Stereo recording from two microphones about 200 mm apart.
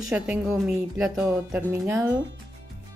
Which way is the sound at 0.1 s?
5° right (ahead or behind).